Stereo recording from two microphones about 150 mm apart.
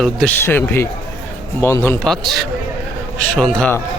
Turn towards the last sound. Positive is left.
turn(degrees=5)  # may be behind; listen again after turning